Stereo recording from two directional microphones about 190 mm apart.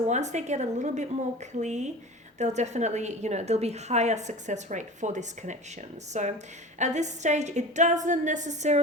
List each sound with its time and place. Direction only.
0.1 s a woman's voice: 35° right (ahead or behind)